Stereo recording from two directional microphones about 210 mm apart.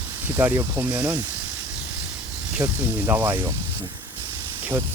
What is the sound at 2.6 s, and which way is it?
Speech, 15° right (ahead or behind).